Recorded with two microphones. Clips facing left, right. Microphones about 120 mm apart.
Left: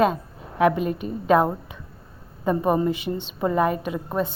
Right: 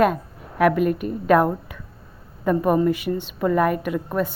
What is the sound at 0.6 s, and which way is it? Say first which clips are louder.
A woman's voice: right 2 dB; 25° left (ahead or behind).